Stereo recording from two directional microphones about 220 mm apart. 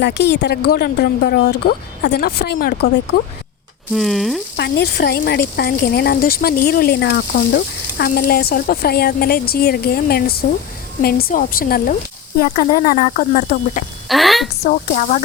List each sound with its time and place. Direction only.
0.0 s speech: 50° left (ahead or behind)
3.9 s speech: centre (ahead or behind)
4.5 s speech: 50° left (ahead or behind)
14.1 s a sound: centre (ahead or behind)
14.8 s speech: 35° left (ahead or behind)